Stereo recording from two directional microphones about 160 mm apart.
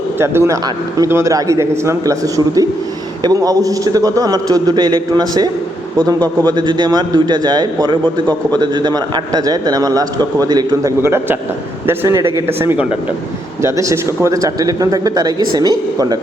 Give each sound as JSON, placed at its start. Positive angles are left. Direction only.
{"t": 0.2, "sound": "a man's voice", "side_deg": -15}